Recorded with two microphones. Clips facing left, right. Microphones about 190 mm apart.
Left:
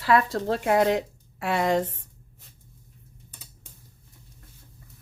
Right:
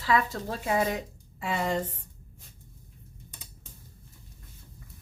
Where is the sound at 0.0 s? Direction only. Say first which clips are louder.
Left 5 dB; 65° left (ahead or behind).